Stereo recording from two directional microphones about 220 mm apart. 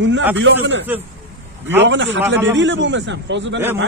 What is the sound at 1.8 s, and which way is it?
A man's voice, 55° right (ahead or behind).